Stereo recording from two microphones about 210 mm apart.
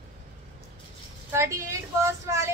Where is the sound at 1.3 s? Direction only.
15° right (ahead or behind).